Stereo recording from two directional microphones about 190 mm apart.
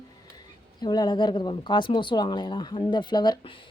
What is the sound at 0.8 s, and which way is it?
Speech, 20° left (ahead or behind).